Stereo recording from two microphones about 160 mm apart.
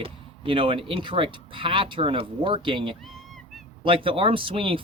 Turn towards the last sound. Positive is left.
turn(degrees=-35)  # may be behind; listen again after turning